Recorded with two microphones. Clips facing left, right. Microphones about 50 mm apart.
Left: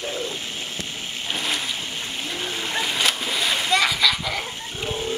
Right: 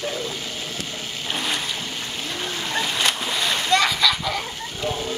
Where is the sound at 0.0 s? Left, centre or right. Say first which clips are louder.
Right 1 dB; centre.